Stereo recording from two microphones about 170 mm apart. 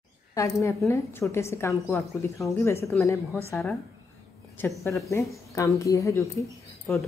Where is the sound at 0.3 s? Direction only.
20° left (ahead or behind).